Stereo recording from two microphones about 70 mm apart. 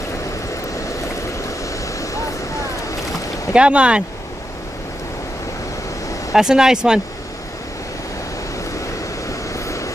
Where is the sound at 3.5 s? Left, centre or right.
Centre.